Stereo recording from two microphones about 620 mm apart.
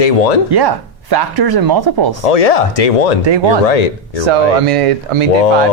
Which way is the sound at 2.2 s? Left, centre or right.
Left.